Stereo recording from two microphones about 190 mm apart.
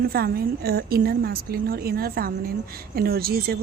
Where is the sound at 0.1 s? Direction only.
55° right (ahead or behind).